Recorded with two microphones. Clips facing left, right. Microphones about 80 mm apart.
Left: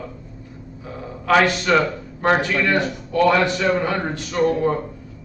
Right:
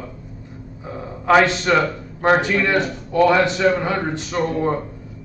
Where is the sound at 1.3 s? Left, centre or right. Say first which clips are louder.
Right 2 dB; centre.